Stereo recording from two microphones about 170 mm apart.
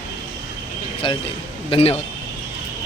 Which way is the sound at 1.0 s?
30° left (ahead or behind).